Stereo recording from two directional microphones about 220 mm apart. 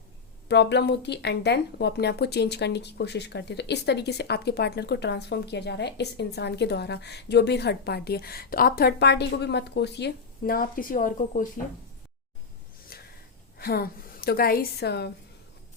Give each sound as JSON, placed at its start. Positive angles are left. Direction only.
{"t": 0.4, "sound": "speech", "side_deg": 50}
{"t": 12.9, "sound": "a sound", "side_deg": 45}
{"t": 13.6, "sound": "speech", "side_deg": 45}